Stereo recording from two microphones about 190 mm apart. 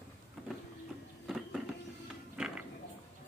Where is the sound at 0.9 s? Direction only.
5° right (ahead or behind).